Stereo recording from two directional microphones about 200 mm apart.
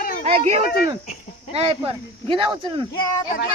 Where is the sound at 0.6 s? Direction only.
55° left (ahead or behind).